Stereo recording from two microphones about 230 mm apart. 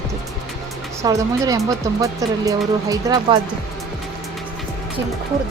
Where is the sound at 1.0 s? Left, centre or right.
Centre.